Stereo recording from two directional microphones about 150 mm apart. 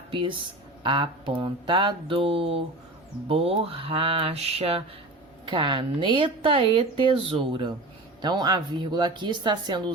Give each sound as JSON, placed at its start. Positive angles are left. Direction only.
{"t": 0.1, "sound": "speech", "side_deg": -35}
{"t": 5.5, "sound": "speech", "side_deg": -30}